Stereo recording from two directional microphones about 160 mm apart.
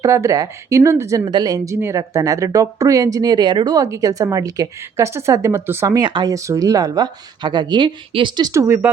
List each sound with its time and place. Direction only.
0.0 s speech: 20° right (ahead or behind)